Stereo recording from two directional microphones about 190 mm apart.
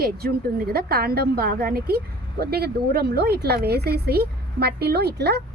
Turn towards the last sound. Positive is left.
turn(degrees=-60)  # may be behind; listen again after turning